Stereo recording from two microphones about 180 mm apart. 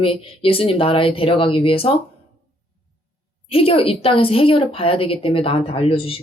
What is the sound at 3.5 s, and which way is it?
Speech, 30° left (ahead or behind).